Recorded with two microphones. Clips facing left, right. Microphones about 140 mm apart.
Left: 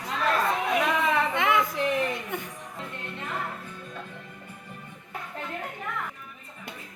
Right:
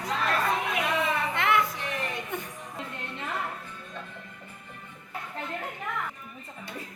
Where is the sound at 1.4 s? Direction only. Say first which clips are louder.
Right 2 dB; 15° left (ahead or behind).